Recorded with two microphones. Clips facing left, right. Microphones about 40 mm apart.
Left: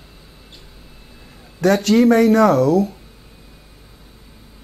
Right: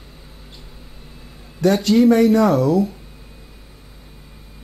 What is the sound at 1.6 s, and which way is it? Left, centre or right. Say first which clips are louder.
Speech: left 1 dB; left.